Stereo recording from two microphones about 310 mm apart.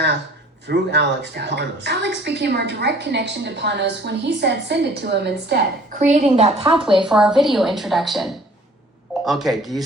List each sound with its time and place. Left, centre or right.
0.7 s a woman's voice: right
6.1 s a woman's voice: right
7.0 s a woman's voice: centre